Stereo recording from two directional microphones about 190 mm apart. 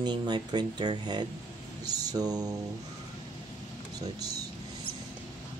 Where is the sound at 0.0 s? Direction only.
25° right (ahead or behind).